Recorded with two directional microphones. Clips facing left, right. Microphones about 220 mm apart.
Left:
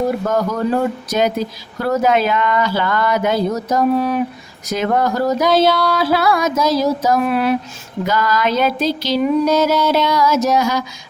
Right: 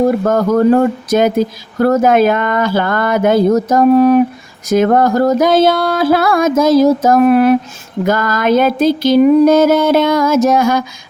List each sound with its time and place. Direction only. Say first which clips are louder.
0.3 s speech: right 7 dB; 50° right (ahead or behind)